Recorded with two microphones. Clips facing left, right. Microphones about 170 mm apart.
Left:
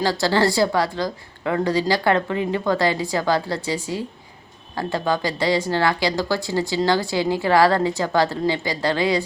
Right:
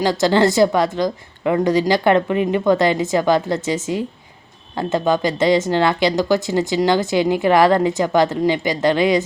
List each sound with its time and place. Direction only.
0.0 s speech: 20° right (ahead or behind)